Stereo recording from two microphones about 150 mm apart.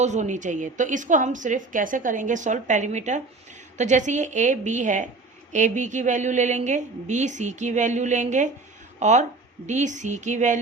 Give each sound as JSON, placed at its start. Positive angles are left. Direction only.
{"t": 0.0, "sound": "a woman's voice", "side_deg": -50}